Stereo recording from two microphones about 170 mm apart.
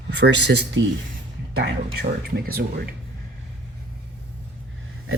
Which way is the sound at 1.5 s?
65° right (ahead or behind).